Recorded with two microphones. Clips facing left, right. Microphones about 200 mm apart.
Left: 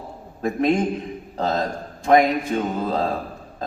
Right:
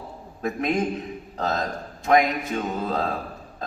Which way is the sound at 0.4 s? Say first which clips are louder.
Left 4 dB; 30° left (ahead or behind).